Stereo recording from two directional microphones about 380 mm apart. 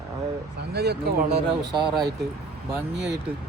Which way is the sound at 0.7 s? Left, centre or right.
Right.